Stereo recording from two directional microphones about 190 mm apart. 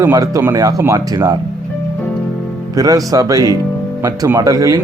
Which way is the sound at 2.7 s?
20° right (ahead or behind).